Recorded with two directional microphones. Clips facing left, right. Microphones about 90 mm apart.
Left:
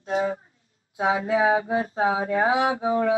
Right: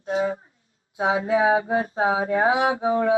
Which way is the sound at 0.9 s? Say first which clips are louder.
Right 1 dB; 30° right (ahead or behind).